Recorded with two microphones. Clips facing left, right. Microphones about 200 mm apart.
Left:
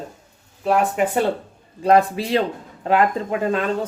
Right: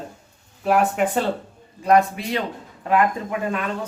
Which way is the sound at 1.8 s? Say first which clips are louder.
Left 2 dB; 30° left (ahead or behind).